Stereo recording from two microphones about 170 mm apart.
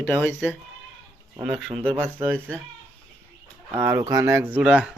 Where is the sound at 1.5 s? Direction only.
Centre (ahead or behind).